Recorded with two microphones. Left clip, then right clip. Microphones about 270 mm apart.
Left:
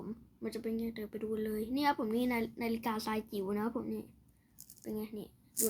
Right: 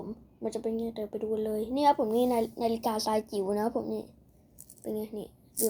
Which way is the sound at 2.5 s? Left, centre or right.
Left.